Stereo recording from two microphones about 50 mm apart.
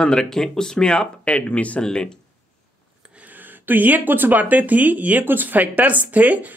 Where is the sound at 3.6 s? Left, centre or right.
Right.